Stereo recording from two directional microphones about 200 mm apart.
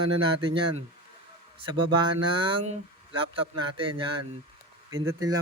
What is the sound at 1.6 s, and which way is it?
Speech, 25° right (ahead or behind).